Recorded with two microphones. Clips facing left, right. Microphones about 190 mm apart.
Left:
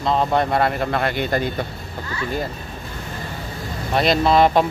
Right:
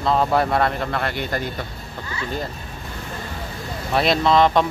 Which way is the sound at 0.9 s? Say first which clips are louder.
Left 4 dB; 20° left (ahead or behind).